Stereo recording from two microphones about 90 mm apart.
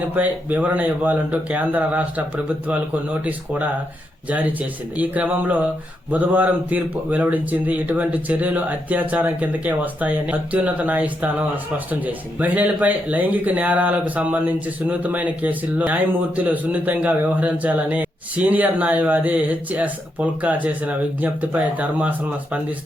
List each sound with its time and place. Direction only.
0.1 s speech: 20° right (ahead or behind)